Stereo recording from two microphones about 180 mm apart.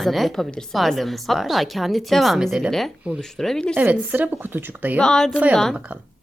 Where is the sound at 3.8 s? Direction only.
10° right (ahead or behind).